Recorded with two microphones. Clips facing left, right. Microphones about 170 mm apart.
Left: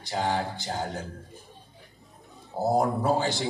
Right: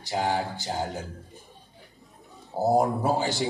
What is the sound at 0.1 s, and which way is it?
Speech, 15° right (ahead or behind).